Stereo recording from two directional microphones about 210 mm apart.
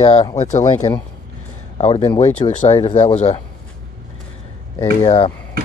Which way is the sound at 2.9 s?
30° left (ahead or behind).